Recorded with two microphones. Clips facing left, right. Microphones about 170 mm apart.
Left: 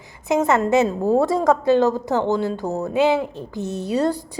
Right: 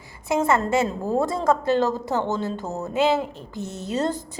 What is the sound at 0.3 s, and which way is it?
A woman's voice, 20° left (ahead or behind).